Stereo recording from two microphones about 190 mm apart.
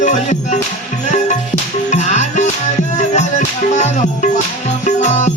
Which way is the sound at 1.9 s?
40° left (ahead or behind).